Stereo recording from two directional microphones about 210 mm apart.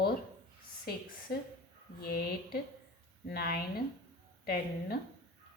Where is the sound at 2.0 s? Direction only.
45° left (ahead or behind).